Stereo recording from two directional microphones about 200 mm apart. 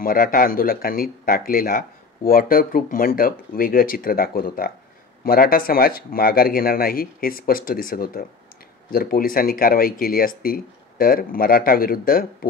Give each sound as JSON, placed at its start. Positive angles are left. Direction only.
{"t": 0.0, "sound": "speech", "side_deg": 45}